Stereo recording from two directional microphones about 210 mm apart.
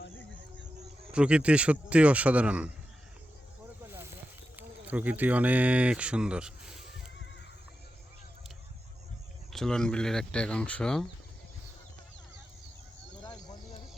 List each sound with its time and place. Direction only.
1.1 s speech: 5° right (ahead or behind)
4.5 s speech: 10° right (ahead or behind)
9.5 s speech: centre (ahead or behind)
13.2 s a sound: 20° left (ahead or behind)